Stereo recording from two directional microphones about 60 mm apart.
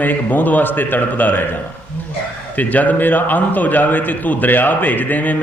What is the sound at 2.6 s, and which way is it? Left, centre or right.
A man's voice, left.